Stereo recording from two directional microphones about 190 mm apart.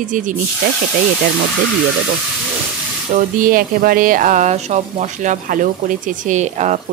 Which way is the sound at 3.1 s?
45° right (ahead or behind).